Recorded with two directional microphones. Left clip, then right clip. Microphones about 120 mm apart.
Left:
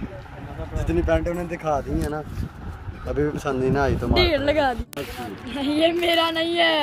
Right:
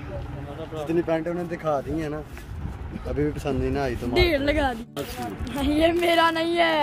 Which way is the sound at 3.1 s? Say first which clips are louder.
Left 2 dB; 20° left (ahead or behind).